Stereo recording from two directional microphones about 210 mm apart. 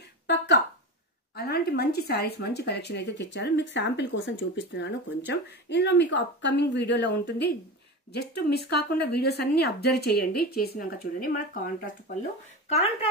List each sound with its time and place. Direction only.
1.3 s speech: 50° left (ahead or behind)
12.6 s speech: 30° left (ahead or behind)